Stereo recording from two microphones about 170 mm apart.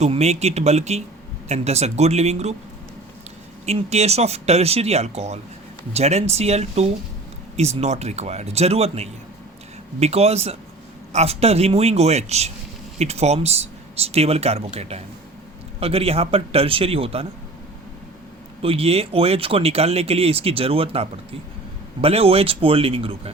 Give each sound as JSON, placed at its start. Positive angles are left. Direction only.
{"t": 0.0, "sound": "speech", "side_deg": -40}
{"t": 3.7, "sound": "speech", "side_deg": -40}
{"t": 18.6, "sound": "speech", "side_deg": -35}